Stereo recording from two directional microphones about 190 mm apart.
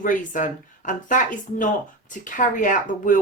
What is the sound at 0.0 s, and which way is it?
Speech, 45° left (ahead or behind).